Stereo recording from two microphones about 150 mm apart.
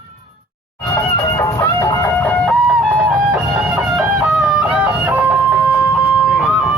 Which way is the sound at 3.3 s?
5° right (ahead or behind).